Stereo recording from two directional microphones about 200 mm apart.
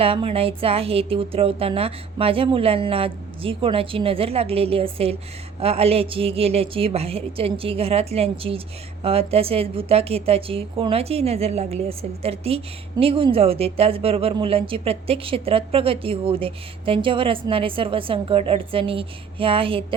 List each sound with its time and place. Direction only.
0.0 s a woman's voice: 30° right (ahead or behind)